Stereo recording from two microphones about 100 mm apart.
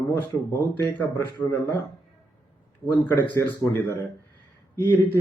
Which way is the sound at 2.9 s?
20° left (ahead or behind).